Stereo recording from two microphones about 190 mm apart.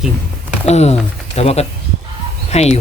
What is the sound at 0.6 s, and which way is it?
Speech, 35° left (ahead or behind).